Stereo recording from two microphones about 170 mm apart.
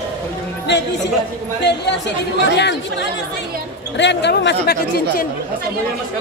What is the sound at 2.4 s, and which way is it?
Speech, 90° left.